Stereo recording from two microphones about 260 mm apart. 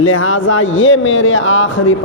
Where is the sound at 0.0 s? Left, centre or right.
Left.